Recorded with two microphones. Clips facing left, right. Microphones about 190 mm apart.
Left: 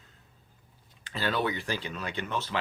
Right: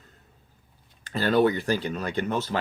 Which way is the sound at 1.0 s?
45° right (ahead or behind).